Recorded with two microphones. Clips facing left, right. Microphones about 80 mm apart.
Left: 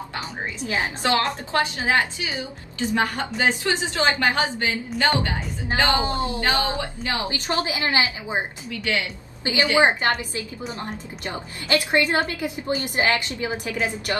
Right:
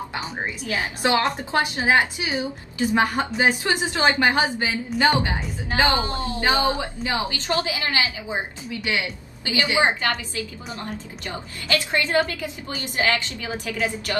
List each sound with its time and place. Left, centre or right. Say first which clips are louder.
0.6 s a woman's voice: left 4 dB; left
1.0 s a woman's voice: right 3 dB; centre
4.6 s speech: right 1 dB; centre
5.0 s a woman's voice: right 2 dB; centre
5.9 s a woman's voice: left 2 dB; left
6.6 s a woman's voice: right 3 dB; centre
7.4 s a woman's voice: left 3 dB; left
8.6 s a woman's voice: even; centre
9.4 s a woman's voice: left 2 dB; left